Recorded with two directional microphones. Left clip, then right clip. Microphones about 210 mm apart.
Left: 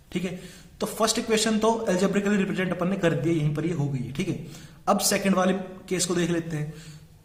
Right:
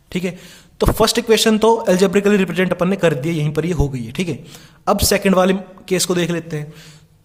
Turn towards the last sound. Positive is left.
turn(degrees=-45)  # may be behind; listen again after turning